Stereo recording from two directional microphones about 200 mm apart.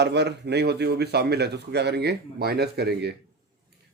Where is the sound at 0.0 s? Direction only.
60° right (ahead or behind).